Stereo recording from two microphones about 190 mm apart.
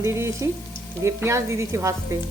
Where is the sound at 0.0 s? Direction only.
15° right (ahead or behind).